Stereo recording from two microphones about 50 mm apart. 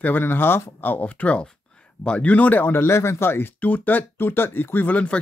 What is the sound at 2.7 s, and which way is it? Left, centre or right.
Speech, left.